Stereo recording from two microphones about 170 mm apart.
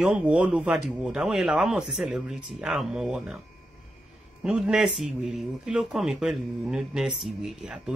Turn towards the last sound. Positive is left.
turn(degrees=-5)  # may be behind; listen again after turning